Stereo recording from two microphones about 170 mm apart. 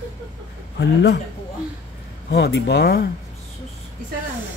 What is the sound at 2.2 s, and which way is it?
Speech, 75° left (ahead or behind).